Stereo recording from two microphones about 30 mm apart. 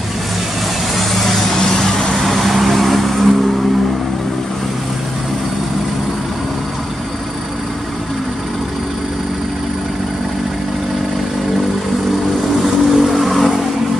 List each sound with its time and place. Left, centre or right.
0.9 s vehicle: centre
1.6 s vehicle: centre
2.2 s vehicle: centre
12.5 s vehicle: centre